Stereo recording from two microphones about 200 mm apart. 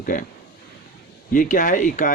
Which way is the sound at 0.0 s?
45° left (ahead or behind).